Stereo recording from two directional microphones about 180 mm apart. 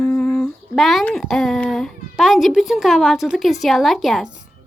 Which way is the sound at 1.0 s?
5° left (ahead or behind).